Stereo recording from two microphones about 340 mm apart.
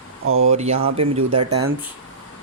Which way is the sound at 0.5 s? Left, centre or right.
Centre.